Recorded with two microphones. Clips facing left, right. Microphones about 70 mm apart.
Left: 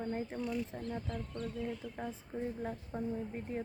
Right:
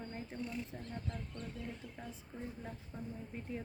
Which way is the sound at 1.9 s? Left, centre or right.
Left.